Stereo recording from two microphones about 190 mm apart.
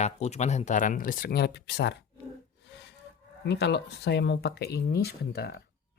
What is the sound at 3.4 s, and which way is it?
Speech, 65° left (ahead or behind).